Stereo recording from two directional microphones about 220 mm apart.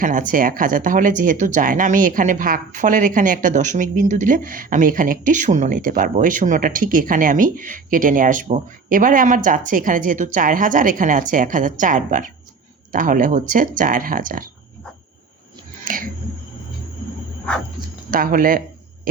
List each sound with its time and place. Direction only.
0.0 s speech: 35° right (ahead or behind)
15.8 s a sound: 40° right (ahead or behind)
18.1 s speech: 40° right (ahead or behind)